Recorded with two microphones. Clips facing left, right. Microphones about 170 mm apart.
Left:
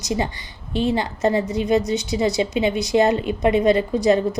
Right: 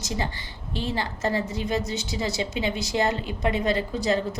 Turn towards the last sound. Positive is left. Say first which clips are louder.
# left 7 dB
turn(degrees=15)  # may be behind; listen again after turning